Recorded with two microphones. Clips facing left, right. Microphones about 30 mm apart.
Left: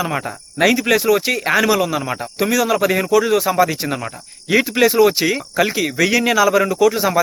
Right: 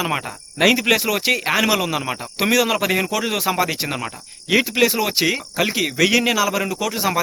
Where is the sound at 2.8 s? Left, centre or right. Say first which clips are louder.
Left 5 dB; centre.